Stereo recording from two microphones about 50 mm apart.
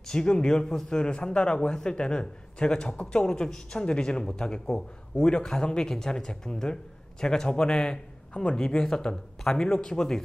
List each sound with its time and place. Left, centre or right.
0.0 s speech: centre
8.3 s a man's voice: left
8.5 s speech: centre